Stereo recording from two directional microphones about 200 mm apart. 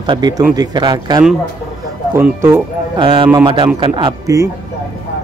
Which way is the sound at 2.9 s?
25° right (ahead or behind).